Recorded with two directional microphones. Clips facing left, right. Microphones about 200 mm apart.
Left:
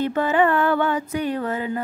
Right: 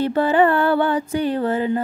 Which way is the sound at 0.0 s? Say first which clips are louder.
Right 3 dB; 35° right (ahead or behind).